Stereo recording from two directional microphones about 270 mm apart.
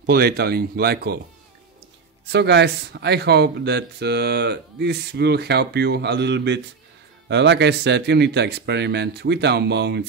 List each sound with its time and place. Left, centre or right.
0.0 s speech: right
2.2 s speech: right